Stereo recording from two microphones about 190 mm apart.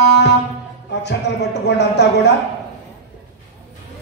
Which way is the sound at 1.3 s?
65° left (ahead or behind).